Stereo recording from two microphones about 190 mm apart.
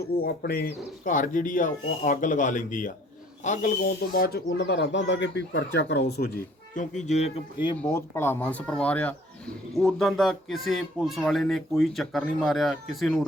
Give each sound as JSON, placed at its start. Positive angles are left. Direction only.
{"t": 0.2, "sound": "speech", "side_deg": 55}
{"t": 6.7, "sound": "speech", "side_deg": 40}
{"t": 7.8, "sound": "speech", "side_deg": 15}